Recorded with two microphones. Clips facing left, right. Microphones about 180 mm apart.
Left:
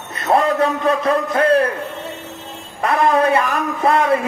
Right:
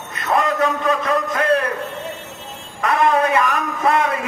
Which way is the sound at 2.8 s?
30° left (ahead or behind).